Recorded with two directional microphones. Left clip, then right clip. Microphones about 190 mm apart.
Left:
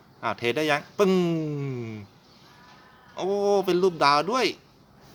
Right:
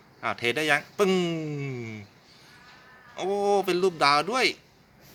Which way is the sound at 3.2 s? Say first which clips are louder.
Left 1 dB; 15° left (ahead or behind).